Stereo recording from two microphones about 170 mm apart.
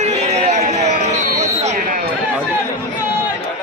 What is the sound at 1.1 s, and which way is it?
Sheep, 40° right (ahead or behind).